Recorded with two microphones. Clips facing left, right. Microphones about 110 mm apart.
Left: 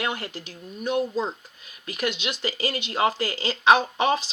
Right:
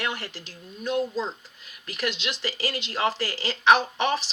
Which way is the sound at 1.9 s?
20° left (ahead or behind).